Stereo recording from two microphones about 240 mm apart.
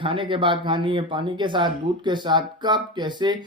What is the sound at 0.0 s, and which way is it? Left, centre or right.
Speech, right.